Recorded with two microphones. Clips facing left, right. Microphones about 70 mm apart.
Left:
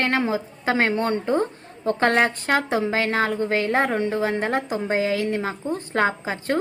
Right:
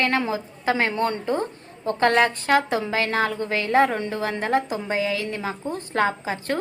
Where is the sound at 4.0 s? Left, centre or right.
Centre.